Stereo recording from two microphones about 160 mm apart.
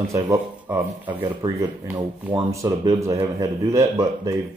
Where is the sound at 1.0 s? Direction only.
30° right (ahead or behind).